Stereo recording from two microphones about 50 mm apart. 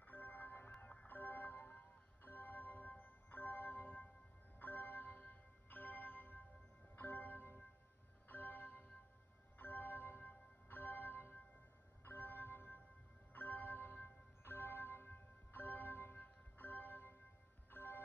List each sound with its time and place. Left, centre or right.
0.1 s music: left
13.3 s music: left